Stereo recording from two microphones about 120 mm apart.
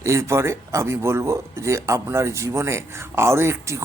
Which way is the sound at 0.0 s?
25° right (ahead or behind).